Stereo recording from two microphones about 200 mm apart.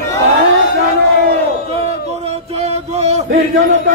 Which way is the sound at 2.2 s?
30° right (ahead or behind).